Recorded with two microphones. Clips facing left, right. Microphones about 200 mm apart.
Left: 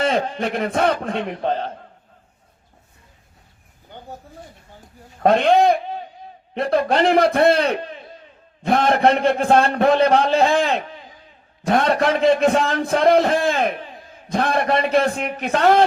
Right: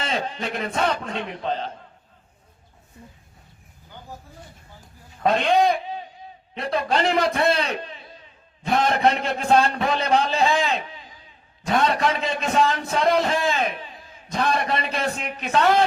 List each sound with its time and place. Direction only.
0.0 s speech: 55° left (ahead or behind)
5.2 s a sound: 50° left (ahead or behind)
6.5 s a man's voice: 55° left (ahead or behind)